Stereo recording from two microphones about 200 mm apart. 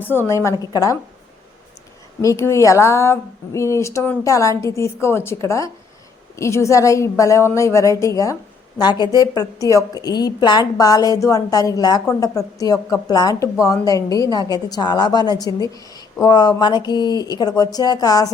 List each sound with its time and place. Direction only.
0.0 s a woman's voice: 10° left (ahead or behind)
2.2 s a woman's voice: 15° left (ahead or behind)